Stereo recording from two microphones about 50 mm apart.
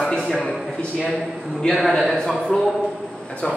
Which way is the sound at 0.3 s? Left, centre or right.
Centre.